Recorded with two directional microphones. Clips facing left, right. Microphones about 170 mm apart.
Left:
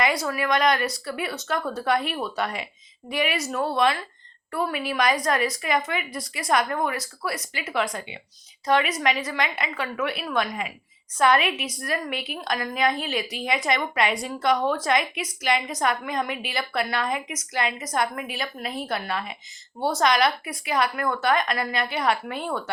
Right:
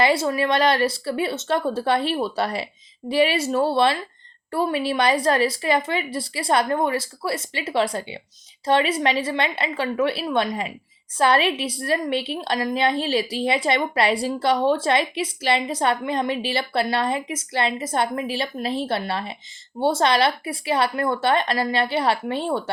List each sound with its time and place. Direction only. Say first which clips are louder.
0.0 s a woman's voice: right 5 dB; 25° right (ahead or behind)